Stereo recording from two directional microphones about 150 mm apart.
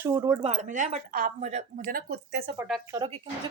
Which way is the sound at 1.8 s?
80° right.